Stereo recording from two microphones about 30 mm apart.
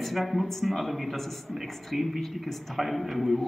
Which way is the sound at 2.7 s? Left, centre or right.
Centre.